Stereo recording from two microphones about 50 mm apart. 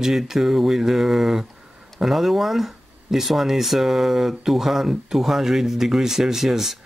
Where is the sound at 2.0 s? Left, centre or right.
Centre.